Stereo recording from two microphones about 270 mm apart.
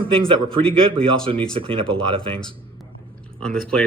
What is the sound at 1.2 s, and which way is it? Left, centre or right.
Speech, centre.